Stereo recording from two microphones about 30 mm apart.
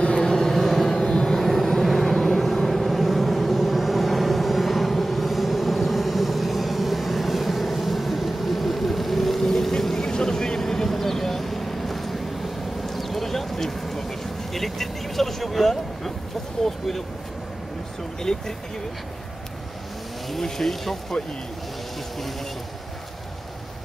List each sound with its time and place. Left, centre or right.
0.2 s vehicle: centre
0.6 s vehicle: centre
1.0 s vehicle: centre
1.5 s vehicle: centre
12.8 s a sound: centre
20.4 s a sound: centre